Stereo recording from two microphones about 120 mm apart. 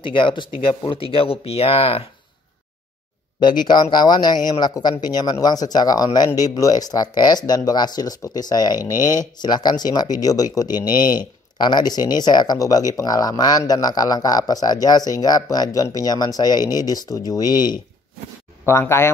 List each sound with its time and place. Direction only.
0.0 s speech: 45° left (ahead or behind)
3.3 s speech: 35° left (ahead or behind)
18.7 s speech: 20° left (ahead or behind)